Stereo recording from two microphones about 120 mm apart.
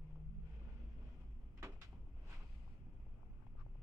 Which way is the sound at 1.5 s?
25° right (ahead or behind).